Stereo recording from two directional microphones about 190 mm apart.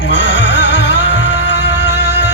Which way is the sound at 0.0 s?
65° left (ahead or behind).